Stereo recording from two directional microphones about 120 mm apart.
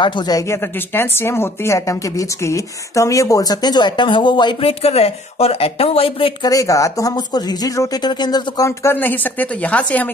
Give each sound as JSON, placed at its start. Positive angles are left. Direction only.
{"t": 0.0, "sound": "a woman's voice", "side_deg": 40}
{"t": 4.6, "sound": "speech", "side_deg": 55}
{"t": 6.5, "sound": "speech", "side_deg": 30}
{"t": 8.6, "sound": "speech", "side_deg": 20}